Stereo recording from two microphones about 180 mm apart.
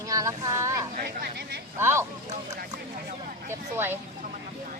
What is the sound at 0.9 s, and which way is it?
Speech, 60° right (ahead or behind).